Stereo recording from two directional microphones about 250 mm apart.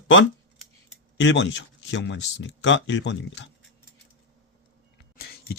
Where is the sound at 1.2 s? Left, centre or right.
Left.